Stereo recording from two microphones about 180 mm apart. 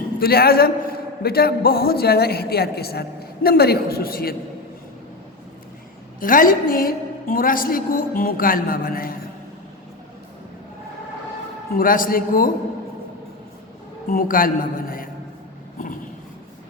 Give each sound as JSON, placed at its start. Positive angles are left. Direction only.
{"t": 0.2, "sound": "a man's voice", "side_deg": 60}
{"t": 6.1, "sound": "a woman's voice", "side_deg": 50}
{"t": 11.8, "sound": "a woman's voice", "side_deg": 50}
{"t": 14.1, "sound": "a woman's voice", "side_deg": 50}